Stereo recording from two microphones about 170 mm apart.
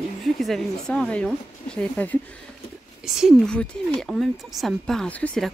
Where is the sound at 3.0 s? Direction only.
Centre (ahead or behind).